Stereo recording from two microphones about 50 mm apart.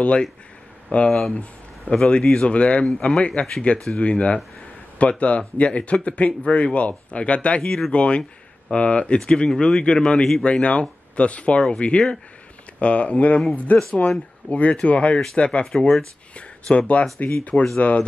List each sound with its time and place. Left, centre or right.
0.0 s speech: left
2.0 s speech: centre